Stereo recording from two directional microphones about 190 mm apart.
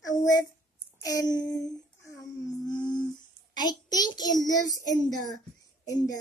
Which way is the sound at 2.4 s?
20° left (ahead or behind).